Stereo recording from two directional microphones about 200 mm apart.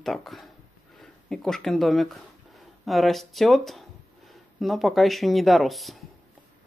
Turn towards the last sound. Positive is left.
turn(degrees=0)  # may be behind; listen again after turning